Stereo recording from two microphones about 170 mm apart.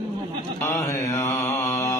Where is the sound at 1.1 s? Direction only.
15° left (ahead or behind).